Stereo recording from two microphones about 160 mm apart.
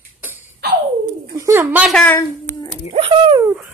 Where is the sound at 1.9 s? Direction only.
10° left (ahead or behind).